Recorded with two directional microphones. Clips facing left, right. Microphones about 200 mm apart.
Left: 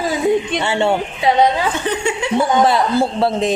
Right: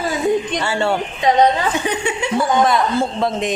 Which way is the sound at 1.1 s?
10° left (ahead or behind).